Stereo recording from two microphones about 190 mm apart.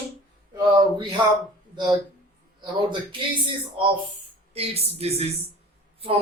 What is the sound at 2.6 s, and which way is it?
Speech, 25° right (ahead or behind).